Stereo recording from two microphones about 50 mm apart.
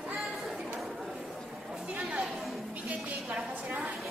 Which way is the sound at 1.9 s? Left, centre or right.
Right.